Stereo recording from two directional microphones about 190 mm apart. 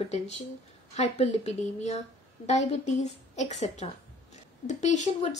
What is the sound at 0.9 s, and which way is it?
Speech, 35° left (ahead or behind).